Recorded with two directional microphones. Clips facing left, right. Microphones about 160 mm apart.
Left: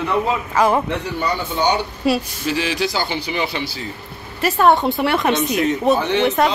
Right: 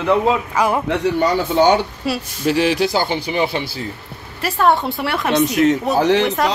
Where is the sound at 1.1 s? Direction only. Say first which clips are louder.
Right 6 dB; 90° right.